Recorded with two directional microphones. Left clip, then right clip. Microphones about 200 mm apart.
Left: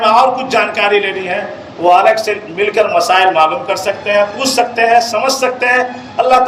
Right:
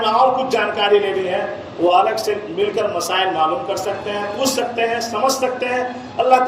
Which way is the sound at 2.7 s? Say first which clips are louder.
Left 12 dB; 50° left (ahead or behind).